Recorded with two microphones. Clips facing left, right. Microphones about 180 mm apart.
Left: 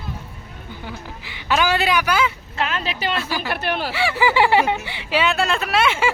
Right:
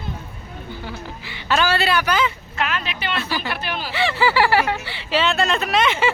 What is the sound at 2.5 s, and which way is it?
Speech, 30° left (ahead or behind).